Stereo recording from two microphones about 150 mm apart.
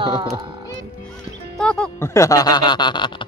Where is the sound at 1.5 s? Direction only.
5° left (ahead or behind).